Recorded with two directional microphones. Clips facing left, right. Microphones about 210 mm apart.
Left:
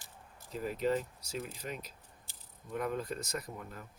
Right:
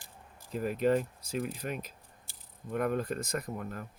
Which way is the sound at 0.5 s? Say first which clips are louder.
Right 5 dB; 55° right (ahead or behind).